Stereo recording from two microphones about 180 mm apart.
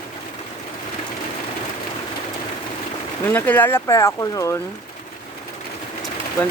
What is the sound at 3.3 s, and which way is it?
Speech, 10° left (ahead or behind).